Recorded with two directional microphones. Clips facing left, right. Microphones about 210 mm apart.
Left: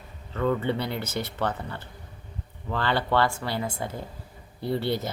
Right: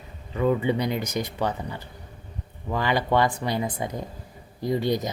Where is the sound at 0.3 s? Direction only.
15° right (ahead or behind).